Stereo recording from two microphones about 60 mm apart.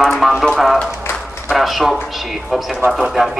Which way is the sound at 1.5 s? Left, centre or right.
Centre.